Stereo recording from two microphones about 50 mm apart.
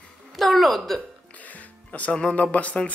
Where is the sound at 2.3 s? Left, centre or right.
Left.